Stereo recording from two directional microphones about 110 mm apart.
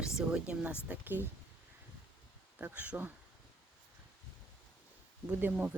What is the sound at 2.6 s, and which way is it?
Speech, 15° right (ahead or behind).